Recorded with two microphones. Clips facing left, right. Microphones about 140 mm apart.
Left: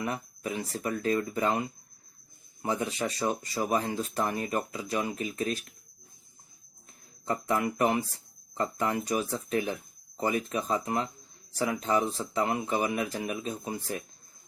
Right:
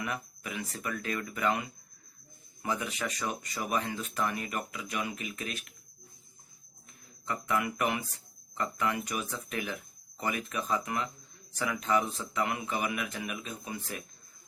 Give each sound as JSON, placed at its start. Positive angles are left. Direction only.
{"t": 0.0, "sound": "speech", "side_deg": 30}
{"t": 7.3, "sound": "speech", "side_deg": 35}